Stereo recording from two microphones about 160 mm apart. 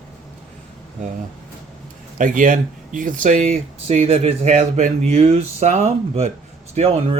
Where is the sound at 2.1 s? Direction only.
55° right (ahead or behind).